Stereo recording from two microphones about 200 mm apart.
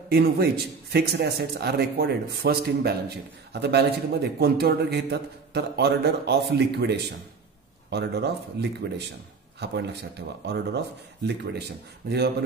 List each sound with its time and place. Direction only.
0.1 s a man's voice: 50° right (ahead or behind)
12.0 s a man's voice: 55° right (ahead or behind)